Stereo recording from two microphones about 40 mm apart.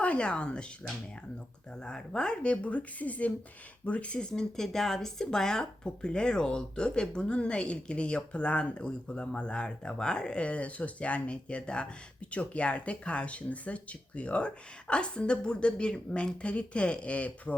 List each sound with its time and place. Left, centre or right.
0.0 s speech: left
1.8 s speech: left
4.3 s speech: centre; by 17.5 s left